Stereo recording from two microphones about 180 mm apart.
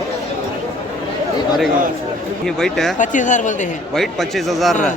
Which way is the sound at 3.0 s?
45° left (ahead or behind).